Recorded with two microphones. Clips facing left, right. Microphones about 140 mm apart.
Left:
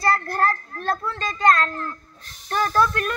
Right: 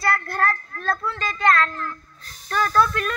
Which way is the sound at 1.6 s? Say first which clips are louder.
Right 1 dB; 30° left (ahead or behind).